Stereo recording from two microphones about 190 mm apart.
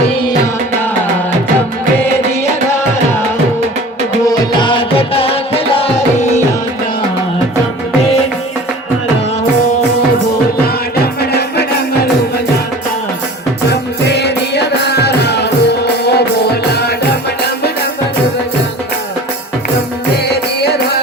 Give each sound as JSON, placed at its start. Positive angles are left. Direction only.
{"t": 4.3, "sound": "music", "side_deg": 25}
{"t": 11.2, "sound": "music", "side_deg": 55}
{"t": 13.7, "sound": "music", "side_deg": 60}
{"t": 20.2, "sound": "music", "side_deg": 60}